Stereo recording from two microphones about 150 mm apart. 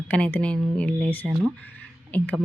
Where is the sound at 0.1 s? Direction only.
10° left (ahead or behind).